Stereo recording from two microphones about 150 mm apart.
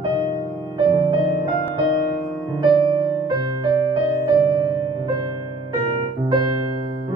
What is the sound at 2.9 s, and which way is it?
Music, 30° right (ahead or behind).